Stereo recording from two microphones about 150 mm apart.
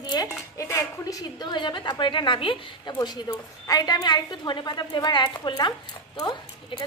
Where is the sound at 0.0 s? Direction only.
25° left (ahead or behind).